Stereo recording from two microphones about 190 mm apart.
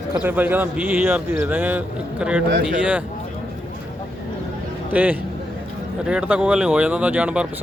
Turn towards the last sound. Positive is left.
turn(degrees=-5)  # may be behind; listen again after turning